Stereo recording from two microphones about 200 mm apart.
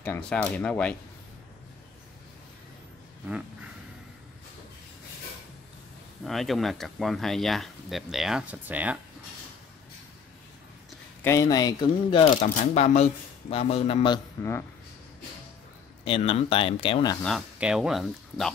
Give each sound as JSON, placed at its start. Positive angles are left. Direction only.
{"t": 0.0, "sound": "speech", "side_deg": 5}
{"t": 6.2, "sound": "speech", "side_deg": 0}
{"t": 11.2, "sound": "speech", "side_deg": 15}
{"t": 16.0, "sound": "speech", "side_deg": 25}
{"t": 17.2, "sound": "speech", "side_deg": 0}